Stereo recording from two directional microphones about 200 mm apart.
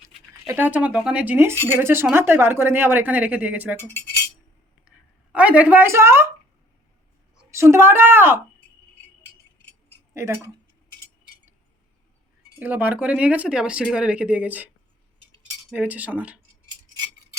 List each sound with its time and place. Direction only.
0.4 s speech: 10° right (ahead or behind)
3.8 s speech: 10° left (ahead or behind)
4.9 s a sound: 5° right (ahead or behind)
7.3 s a woman's voice: 15° right (ahead or behind)
10.2 s speech: 15° right (ahead or behind)
12.5 s speech: 10° right (ahead or behind)
15.7 s speech: 10° right (ahead or behind)